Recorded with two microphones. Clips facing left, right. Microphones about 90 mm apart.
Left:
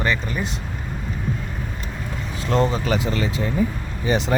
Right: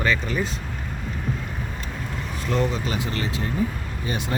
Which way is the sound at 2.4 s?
90° left.